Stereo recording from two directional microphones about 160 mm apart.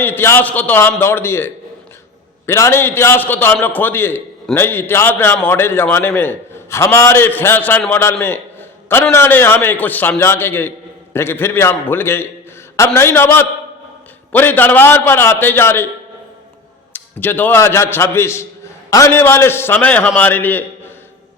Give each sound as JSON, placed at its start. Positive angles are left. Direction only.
{"t": 0.0, "sound": "a man's voice", "side_deg": 15}
{"t": 9.1, "sound": "a man's voice", "side_deg": 15}
{"t": 16.9, "sound": "a man's voice", "side_deg": 10}